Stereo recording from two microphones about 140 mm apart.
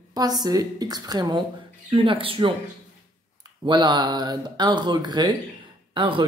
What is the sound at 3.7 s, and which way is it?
Speech, 35° right (ahead or behind).